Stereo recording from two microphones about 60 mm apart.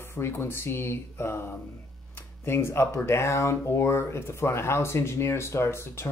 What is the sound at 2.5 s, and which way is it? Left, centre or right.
A man's voice, left.